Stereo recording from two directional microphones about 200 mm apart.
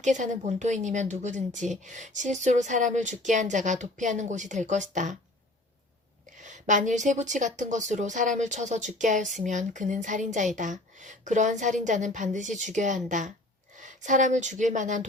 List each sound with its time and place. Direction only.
0.0 s speech: 35° right (ahead or behind)
6.4 s a woman's voice: 40° right (ahead or behind)